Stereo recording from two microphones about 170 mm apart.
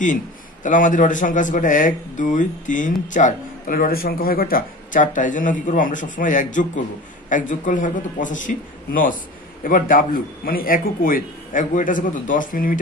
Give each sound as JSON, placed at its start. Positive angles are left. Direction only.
{"t": 0.7, "sound": "a man's voice", "side_deg": 50}